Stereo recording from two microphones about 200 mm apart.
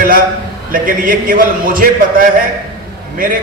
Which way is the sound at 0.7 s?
45° right (ahead or behind).